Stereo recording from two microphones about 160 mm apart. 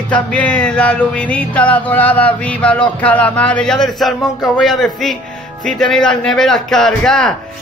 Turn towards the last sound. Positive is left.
turn(degrees=5)  # may be behind; listen again after turning